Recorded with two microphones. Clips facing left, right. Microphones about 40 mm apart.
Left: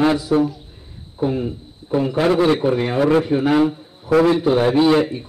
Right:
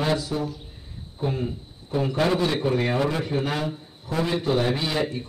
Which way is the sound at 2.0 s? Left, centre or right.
Left.